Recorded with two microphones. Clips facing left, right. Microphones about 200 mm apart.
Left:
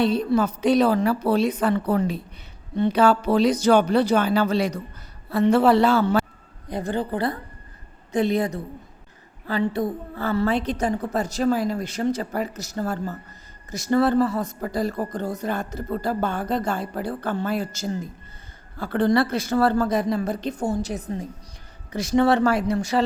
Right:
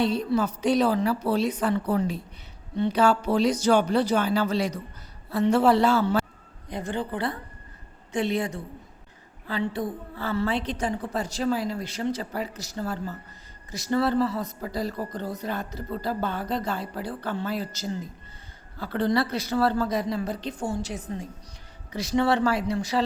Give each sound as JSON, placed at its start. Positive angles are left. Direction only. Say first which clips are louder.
{"t": 0.0, "sound": "a woman's voice", "louder": "left 4 dB", "side_deg": 55}
{"t": 6.7, "sound": "speech", "louder": "left 4 dB", "side_deg": 35}